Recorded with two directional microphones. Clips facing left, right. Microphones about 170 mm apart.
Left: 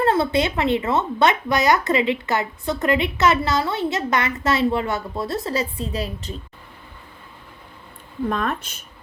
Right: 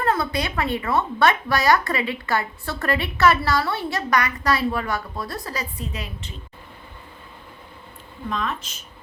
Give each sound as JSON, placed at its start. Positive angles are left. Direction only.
{"t": 0.0, "sound": "speech", "side_deg": 25}
{"t": 8.3, "sound": "speech", "side_deg": 55}